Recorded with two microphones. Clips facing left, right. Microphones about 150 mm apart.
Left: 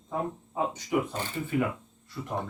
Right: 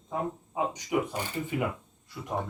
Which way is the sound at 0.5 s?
15° right (ahead or behind).